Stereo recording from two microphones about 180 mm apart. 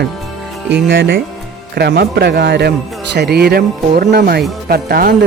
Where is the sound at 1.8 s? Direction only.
65° right (ahead or behind).